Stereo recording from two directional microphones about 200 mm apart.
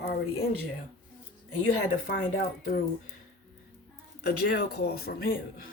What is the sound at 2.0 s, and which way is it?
Speech, 45° left (ahead or behind).